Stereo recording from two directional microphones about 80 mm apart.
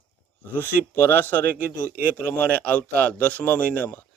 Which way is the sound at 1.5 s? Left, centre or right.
Right.